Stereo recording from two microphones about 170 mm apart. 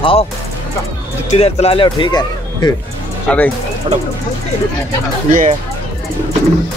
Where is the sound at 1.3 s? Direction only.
40° left (ahead or behind).